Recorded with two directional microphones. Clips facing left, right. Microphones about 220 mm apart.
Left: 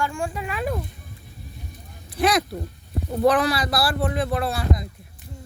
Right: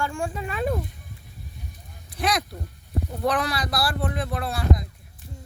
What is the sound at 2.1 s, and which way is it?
Speech, 5° left (ahead or behind).